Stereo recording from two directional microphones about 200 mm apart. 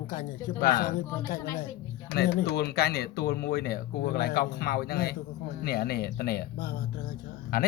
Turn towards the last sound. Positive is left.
turn(degrees=45)  # may be behind; listen again after turning